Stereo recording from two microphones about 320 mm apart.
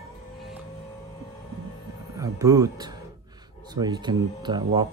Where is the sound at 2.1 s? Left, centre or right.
Centre.